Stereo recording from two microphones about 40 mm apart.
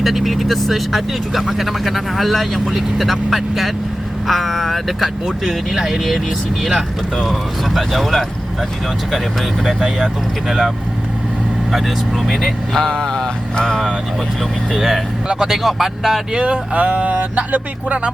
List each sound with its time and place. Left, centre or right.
0.0 s speech: centre
9.6 s speech: centre
11.7 s speech: centre
12.7 s mantra: centre
14.7 s speech: centre
16.3 s speech: right